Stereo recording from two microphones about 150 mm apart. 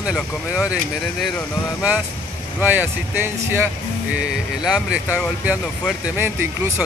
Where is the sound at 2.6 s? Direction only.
10° right (ahead or behind).